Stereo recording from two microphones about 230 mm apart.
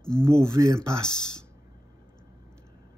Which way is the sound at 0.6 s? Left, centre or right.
Centre.